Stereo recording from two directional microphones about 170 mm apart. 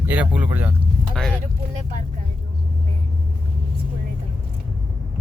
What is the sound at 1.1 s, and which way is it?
Speech, 5° left (ahead or behind).